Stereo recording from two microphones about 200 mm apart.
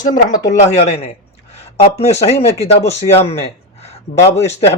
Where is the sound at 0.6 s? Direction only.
30° left (ahead or behind).